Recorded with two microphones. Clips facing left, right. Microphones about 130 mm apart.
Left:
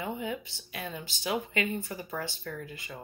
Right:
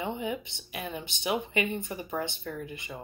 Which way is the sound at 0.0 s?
20° right (ahead or behind).